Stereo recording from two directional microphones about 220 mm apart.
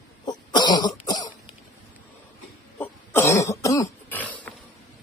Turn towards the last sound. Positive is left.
turn(degrees=5)  # may be behind; listen again after turning